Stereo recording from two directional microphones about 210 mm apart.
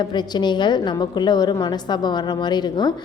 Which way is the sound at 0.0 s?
20° left (ahead or behind).